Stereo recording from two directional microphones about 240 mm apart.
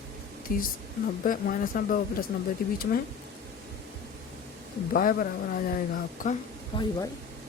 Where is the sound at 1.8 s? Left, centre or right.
Left.